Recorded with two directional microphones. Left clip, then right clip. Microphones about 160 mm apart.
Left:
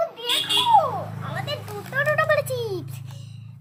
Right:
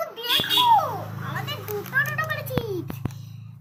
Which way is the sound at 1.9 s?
85° left.